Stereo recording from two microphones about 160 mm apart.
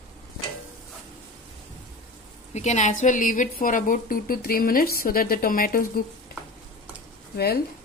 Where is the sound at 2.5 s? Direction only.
45° left (ahead or behind).